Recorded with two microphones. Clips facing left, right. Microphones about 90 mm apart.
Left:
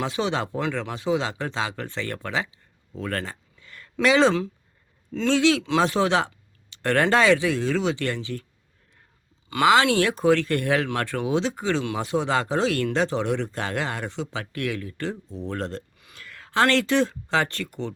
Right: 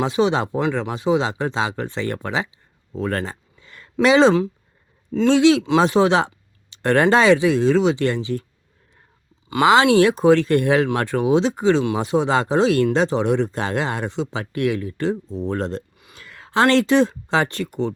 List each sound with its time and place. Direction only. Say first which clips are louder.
0.0 s speech: right 7 dB; 20° right (ahead or behind)
9.5 s speech: right 4 dB; 20° right (ahead or behind)